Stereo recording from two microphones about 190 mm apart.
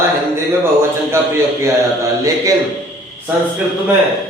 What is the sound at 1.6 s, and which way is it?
Speech, 15° right (ahead or behind).